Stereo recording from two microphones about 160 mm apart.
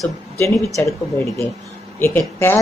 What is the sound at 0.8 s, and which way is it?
Speech, 20° left (ahead or behind).